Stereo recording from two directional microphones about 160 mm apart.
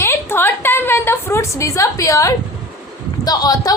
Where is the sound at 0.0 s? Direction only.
15° left (ahead or behind).